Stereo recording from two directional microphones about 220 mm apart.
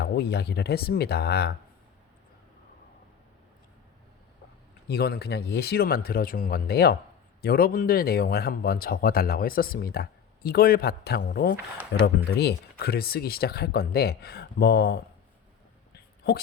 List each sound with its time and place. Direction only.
0.0 s speech: 50° left (ahead or behind)
4.9 s speech: 45° left (ahead or behind)